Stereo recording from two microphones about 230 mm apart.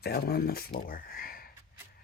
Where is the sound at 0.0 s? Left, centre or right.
Left.